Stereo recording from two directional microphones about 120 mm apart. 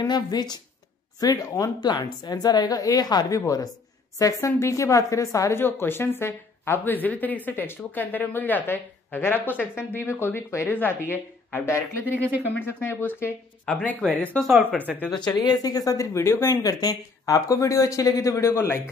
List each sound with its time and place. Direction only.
0.0 s a woman's voice: 35° left (ahead or behind); by 13.3 s 20° left (ahead or behind)
13.7 s speech: 10° left (ahead or behind)
15.1 s a woman's voice: 35° left (ahead or behind)